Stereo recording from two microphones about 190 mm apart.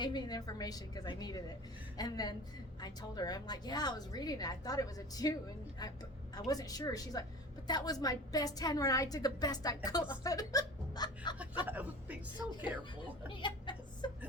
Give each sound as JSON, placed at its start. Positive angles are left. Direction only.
{"t": 0.0, "sound": "a woman's voice", "side_deg": 20}
{"t": 11.6, "sound": "a man's voice", "side_deg": -10}
{"t": 13.2, "sound": "speech", "side_deg": 25}